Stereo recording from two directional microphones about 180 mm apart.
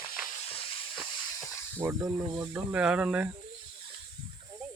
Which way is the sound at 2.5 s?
5° right (ahead or behind).